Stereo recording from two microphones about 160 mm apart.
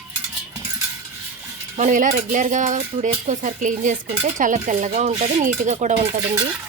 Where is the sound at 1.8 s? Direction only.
50° right (ahead or behind).